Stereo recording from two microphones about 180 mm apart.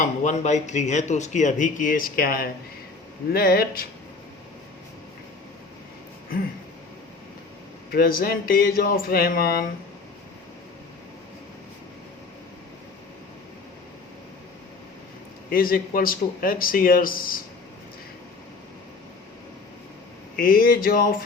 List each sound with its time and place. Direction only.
0.0 s speech: 40° left (ahead or behind); by 3.8 s 55° left (ahead or behind)
7.9 s speech: 55° left (ahead or behind)
15.4 s speech: 55° left (ahead or behind)
20.4 s speech: 55° left (ahead or behind)